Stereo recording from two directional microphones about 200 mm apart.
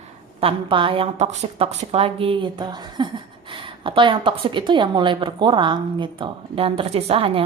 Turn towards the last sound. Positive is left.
turn(degrees=-30)  # may be behind; listen again after turning